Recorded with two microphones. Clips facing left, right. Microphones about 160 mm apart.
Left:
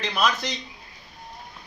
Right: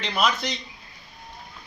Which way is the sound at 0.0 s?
20° right (ahead or behind).